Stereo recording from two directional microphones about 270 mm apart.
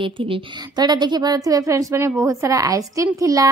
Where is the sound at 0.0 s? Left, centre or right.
Centre.